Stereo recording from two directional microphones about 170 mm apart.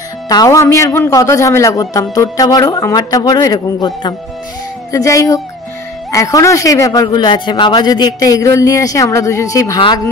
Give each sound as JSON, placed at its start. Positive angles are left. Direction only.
{"t": 0.3, "sound": "a man's voice", "side_deg": 20}